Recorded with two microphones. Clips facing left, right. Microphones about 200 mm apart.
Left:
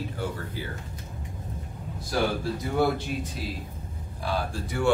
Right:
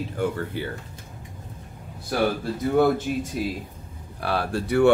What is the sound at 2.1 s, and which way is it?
Speech, 55° right (ahead or behind).